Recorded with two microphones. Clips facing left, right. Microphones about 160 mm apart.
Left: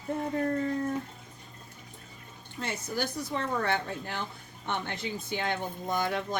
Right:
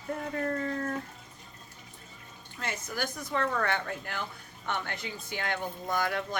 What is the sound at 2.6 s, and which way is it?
Speech, 25° left (ahead or behind).